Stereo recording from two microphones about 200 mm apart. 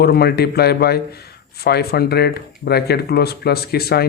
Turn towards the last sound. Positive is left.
turn(degrees=50)  # may be behind; listen again after turning